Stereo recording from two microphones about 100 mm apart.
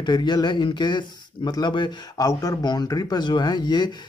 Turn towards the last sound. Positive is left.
turn(degrees=50)  # may be behind; listen again after turning